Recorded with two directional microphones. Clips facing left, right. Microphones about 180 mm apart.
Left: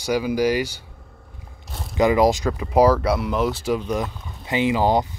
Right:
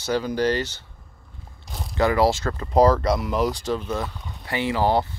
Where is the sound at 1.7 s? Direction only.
Centre (ahead or behind).